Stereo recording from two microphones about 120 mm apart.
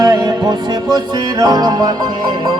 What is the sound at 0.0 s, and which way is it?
Music, 35° right (ahead or behind).